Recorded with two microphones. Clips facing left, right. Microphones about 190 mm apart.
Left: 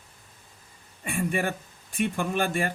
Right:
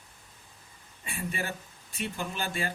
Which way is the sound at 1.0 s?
55° left (ahead or behind).